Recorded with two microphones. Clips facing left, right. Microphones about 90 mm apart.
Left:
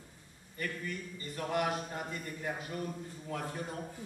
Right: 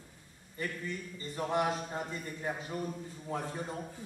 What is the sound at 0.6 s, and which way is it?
A man's voice, 25° right (ahead or behind).